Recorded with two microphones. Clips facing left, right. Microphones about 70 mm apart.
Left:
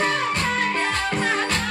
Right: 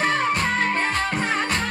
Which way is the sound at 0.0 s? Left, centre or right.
Right.